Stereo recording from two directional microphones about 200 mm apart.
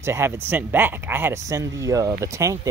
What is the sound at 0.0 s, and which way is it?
Speech, 15° right (ahead or behind).